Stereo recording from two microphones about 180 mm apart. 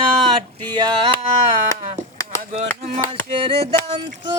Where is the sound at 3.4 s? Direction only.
30° right (ahead or behind).